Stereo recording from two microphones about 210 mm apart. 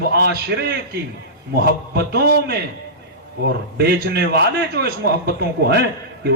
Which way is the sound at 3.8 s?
50° right (ahead or behind).